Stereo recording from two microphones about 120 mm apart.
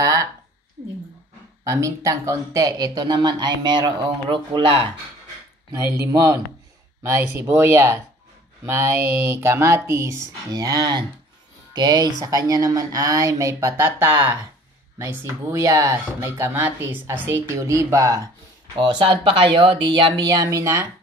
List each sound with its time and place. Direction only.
0.0 s a sound: 30° right (ahead or behind)
1.6 s speech: 25° right (ahead or behind); by 4.9 s 45° right (ahead or behind)
5.7 s speech: 30° right (ahead or behind)
18.8 s speech: 40° right (ahead or behind)
20.3 s speech: 25° right (ahead or behind)